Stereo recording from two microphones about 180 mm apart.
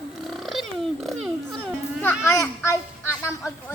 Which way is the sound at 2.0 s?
10° left (ahead or behind).